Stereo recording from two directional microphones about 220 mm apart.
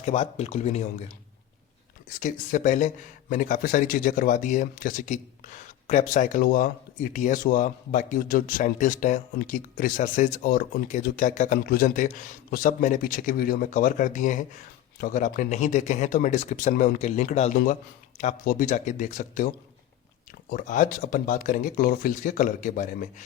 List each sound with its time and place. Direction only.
0.0 s speech: 30° left (ahead or behind)
2.1 s speech: 35° left (ahead or behind)
20.5 s speech: 40° left (ahead or behind)